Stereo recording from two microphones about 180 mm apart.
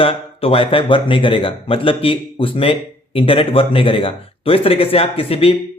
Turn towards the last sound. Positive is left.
turn(degrees=30)  # may be behind; listen again after turning